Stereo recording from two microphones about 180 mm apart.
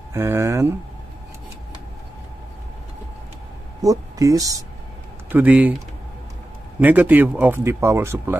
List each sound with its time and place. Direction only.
0.1 s speech: 15° right (ahead or behind)
3.8 s speech: 20° right (ahead or behind)
5.3 s speech: 10° right (ahead or behind)
6.8 s speech: 10° right (ahead or behind)